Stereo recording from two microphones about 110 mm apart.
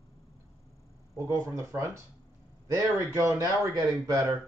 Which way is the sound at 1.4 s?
30° right (ahead or behind).